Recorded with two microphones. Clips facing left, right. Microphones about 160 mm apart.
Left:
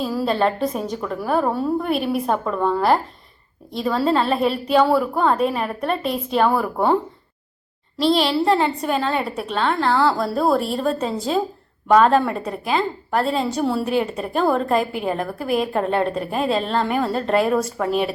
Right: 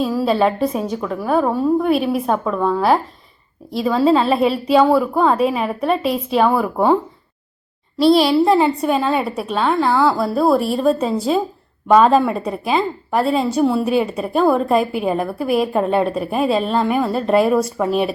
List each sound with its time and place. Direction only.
0.0 s a sound: 5° left (ahead or behind)
0.3 s a woman's voice: 5° right (ahead or behind)
8.0 s a woman's voice: 10° right (ahead or behind)
13.8 s a woman's voice: 15° right (ahead or behind)